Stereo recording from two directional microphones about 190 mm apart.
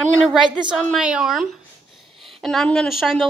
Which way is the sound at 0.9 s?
5° right (ahead or behind).